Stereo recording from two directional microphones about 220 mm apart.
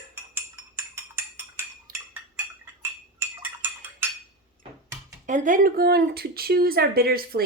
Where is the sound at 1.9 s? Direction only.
40° right (ahead or behind).